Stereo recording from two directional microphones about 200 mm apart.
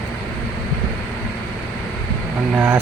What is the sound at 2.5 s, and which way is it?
Vehicle, 10° right (ahead or behind).